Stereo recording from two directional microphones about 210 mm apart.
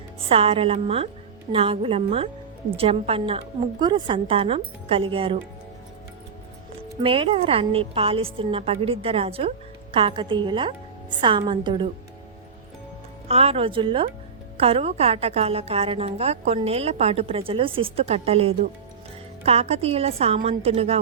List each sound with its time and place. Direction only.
0.3 s a woman's voice: 25° right (ahead or behind)
7.0 s a woman's voice: 25° right (ahead or behind)
13.2 s a woman's voice: 30° right (ahead or behind)